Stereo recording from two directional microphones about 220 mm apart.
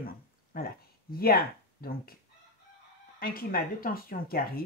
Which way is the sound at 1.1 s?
40° left (ahead or behind).